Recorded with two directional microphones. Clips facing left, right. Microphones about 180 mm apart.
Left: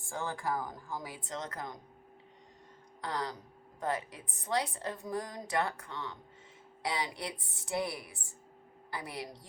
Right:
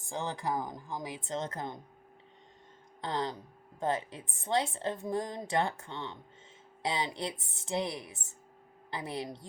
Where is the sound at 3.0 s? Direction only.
25° right (ahead or behind).